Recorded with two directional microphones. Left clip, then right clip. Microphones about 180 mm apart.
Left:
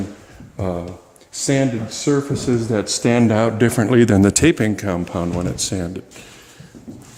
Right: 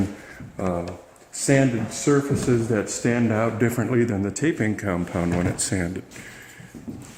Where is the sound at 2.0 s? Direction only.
40° left (ahead or behind).